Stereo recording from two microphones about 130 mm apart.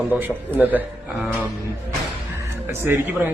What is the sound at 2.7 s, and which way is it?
Speech, 20° right (ahead or behind).